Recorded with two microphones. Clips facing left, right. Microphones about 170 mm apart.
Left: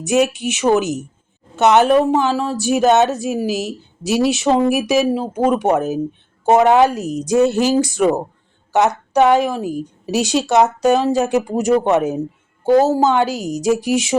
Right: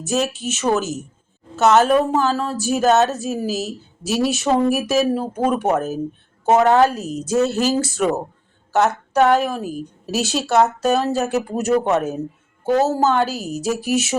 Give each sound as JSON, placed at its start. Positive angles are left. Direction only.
{"t": 0.0, "sound": "a woman's voice", "side_deg": 15}